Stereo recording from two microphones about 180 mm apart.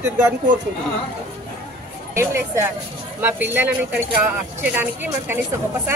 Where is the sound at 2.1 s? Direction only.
15° right (ahead or behind).